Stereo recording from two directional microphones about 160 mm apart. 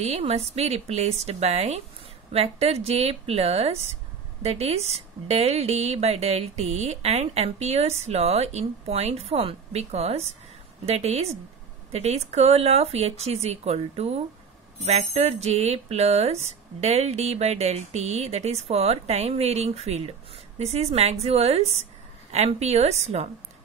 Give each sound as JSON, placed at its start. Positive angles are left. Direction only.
{"t": 0.0, "sound": "a woman's voice", "side_deg": -40}